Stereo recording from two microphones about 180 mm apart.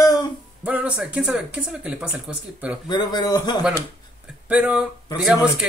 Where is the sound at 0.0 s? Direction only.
20° left (ahead or behind).